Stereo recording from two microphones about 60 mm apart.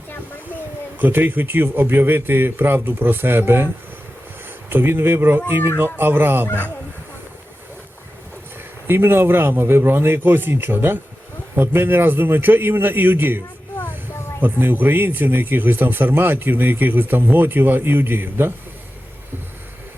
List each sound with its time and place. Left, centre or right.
0.9 s speech: right
4.7 s speech: right
8.9 s speech: right
14.4 s speech: right